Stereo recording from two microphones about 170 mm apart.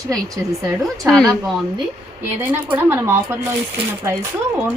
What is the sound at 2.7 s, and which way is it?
Speech, 15° right (ahead or behind).